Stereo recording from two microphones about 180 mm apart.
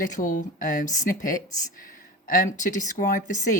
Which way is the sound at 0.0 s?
45° left (ahead or behind).